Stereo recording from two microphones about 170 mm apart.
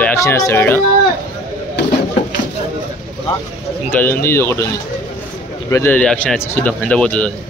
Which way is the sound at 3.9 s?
10° left (ahead or behind).